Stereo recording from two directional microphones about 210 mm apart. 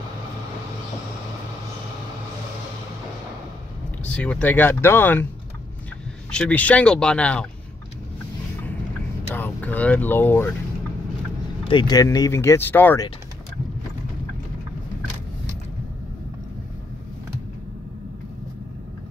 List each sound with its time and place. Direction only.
4.0 s speech: 5° left (ahead or behind)
6.3 s speech: 5° left (ahead or behind)
9.3 s speech: 10° left (ahead or behind)
11.6 s speech: 20° left (ahead or behind)